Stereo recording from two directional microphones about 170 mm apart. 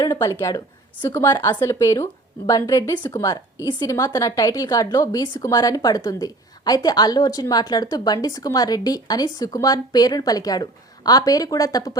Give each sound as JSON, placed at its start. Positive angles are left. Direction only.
{"t": 0.0, "sound": "a woman's voice", "side_deg": 20}